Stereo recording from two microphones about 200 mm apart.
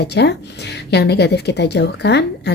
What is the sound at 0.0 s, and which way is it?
A woman's voice, 55° left (ahead or behind).